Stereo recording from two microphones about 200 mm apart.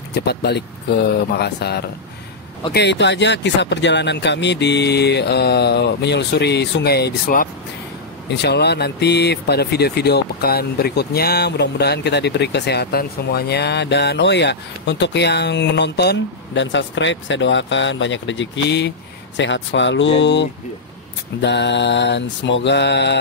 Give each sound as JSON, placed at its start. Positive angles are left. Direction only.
{"t": 0.1, "sound": "speech", "side_deg": 55}